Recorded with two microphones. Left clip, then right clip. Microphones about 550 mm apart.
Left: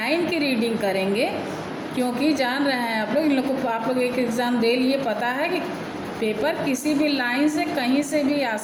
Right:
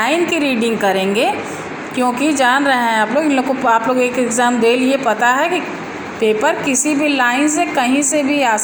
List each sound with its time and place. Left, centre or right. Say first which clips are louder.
0.0 s a woman's voice: right 7 dB; left
2.0 s a woman's voice: right 8 dB; left